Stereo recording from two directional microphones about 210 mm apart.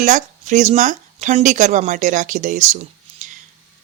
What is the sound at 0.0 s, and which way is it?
Speech, 35° right (ahead or behind).